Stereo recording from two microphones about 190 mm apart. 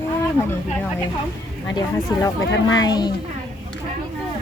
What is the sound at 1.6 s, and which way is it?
Speech, 20° left (ahead or behind).